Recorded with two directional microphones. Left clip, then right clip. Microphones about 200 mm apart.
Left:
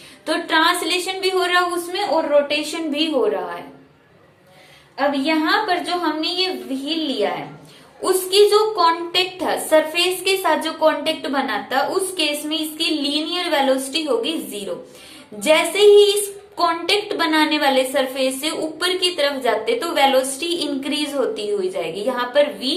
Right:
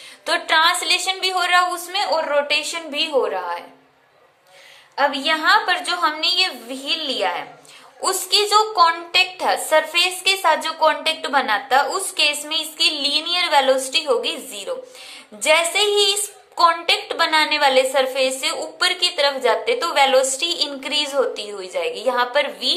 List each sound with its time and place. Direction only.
0.3 s a woman's voice: 30° right (ahead or behind)
4.9 s a woman's voice: 35° right (ahead or behind)